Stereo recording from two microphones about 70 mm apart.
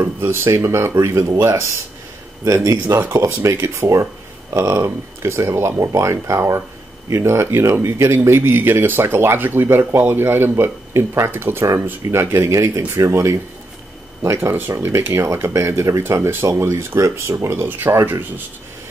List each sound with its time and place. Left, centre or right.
0.0 s speech: right